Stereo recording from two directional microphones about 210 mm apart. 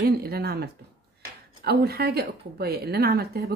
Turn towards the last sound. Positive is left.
turn(degrees=-50)  # may be behind; listen again after turning